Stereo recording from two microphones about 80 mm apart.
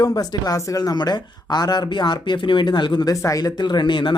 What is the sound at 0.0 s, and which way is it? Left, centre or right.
A woman's voice, left.